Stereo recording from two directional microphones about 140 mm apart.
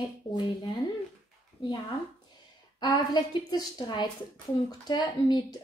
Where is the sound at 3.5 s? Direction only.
30° left (ahead or behind).